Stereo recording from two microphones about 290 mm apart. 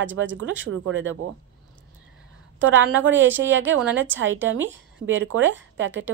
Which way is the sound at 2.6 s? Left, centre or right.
Right.